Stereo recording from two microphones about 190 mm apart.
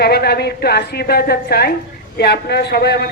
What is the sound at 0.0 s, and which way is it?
A woman's voice, 55° left (ahead or behind).